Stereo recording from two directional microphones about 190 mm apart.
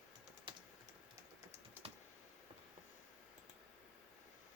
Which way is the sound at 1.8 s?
10° right (ahead or behind).